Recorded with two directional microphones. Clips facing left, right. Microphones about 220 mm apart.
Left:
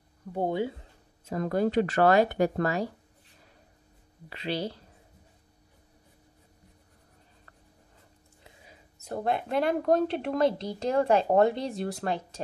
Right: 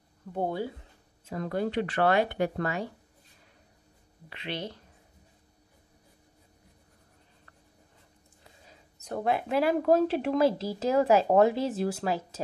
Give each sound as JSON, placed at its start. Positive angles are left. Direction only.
{"t": 0.3, "sound": "speech", "side_deg": 15}
{"t": 1.2, "sound": "speech", "side_deg": 40}
{"t": 4.3, "sound": "speech", "side_deg": 35}
{"t": 8.6, "sound": "speech", "side_deg": 5}